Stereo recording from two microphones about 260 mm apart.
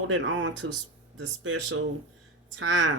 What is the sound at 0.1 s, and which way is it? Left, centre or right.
Speech, right.